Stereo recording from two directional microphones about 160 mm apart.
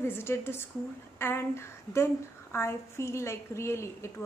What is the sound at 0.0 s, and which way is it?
A woman's voice, 15° left (ahead or behind).